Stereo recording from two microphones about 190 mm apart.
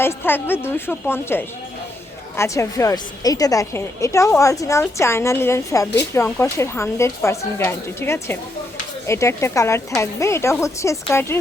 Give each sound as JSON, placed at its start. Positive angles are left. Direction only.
{"t": 0.0, "sound": "a woman's voice", "side_deg": 10}